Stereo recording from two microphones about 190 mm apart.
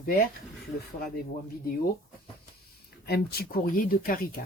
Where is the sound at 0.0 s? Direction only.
50° left (ahead or behind).